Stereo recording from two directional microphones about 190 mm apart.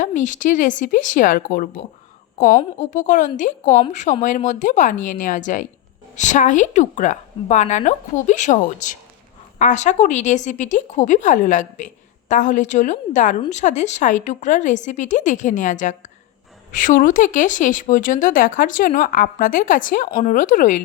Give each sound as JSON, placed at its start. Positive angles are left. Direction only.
{"t": 0.0, "sound": "a woman's voice", "side_deg": 40}